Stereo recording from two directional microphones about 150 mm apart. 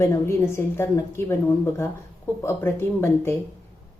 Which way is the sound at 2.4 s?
15° left (ahead or behind).